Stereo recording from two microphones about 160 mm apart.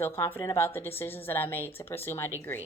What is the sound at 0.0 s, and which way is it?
A woman's voice, 15° left (ahead or behind).